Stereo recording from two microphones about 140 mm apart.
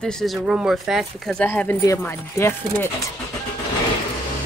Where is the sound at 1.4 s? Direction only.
15° left (ahead or behind).